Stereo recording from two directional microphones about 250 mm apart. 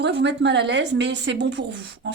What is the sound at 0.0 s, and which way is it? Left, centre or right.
A woman's voice, right.